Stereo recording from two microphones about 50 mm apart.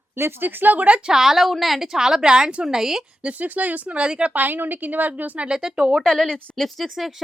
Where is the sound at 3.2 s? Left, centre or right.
Right.